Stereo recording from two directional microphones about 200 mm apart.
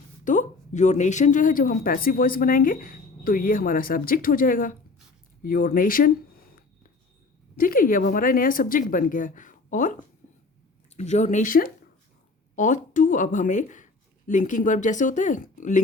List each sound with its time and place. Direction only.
0.3 s speech: 40° left (ahead or behind)
7.6 s speech: 45° left (ahead or behind)